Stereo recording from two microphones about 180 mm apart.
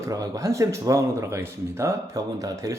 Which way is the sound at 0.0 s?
20° right (ahead or behind).